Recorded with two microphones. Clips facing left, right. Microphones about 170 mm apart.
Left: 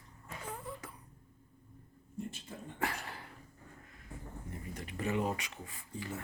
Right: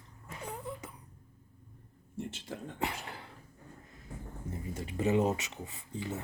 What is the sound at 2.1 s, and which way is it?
Speech, 85° right.